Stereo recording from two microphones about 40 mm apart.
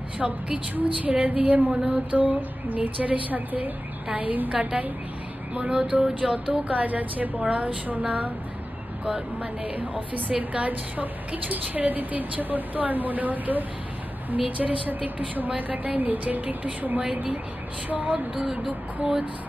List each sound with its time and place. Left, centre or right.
0.2 s speech: centre
0.7 s a woman's voice: right
4.5 s a woman's voice: right
5.5 s a sound: right
6.7 s a woman's voice: right
8.0 s a sound: right
9.8 s a woman's voice: right
18.3 s speech: centre